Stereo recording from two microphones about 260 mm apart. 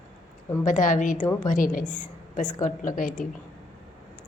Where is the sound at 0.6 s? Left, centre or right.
Left.